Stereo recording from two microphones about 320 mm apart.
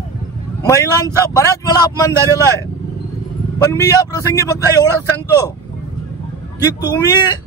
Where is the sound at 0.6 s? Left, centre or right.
Centre.